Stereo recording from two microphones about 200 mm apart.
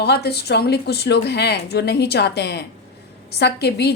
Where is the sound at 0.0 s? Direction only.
55° left (ahead or behind).